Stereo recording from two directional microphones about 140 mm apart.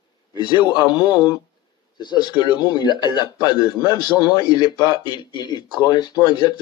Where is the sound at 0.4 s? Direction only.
30° left (ahead or behind).